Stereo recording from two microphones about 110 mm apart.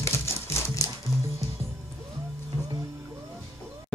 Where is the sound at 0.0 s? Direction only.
25° left (ahead or behind).